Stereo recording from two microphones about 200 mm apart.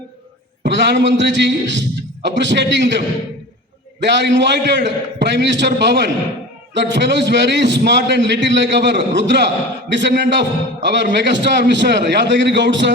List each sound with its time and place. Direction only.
0.6 s a man's voice: 60° right (ahead or behind)
4.0 s a man's voice: 60° right (ahead or behind)